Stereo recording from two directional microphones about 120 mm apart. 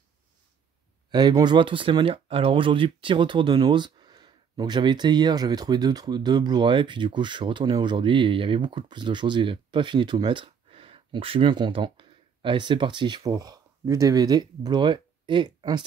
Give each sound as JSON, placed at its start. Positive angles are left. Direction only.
{"t": 1.1, "sound": "speech", "side_deg": -35}